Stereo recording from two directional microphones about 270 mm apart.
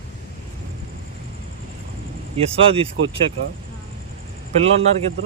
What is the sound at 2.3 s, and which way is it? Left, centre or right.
Speech, right.